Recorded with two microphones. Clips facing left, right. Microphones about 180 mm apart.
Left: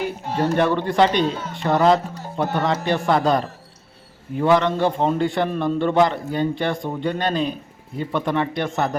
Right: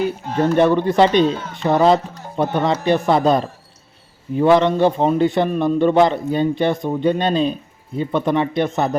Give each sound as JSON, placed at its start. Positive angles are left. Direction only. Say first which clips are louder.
{"t": 0.3, "sound": "a man's voice", "louder": "right 4 dB", "side_deg": -20}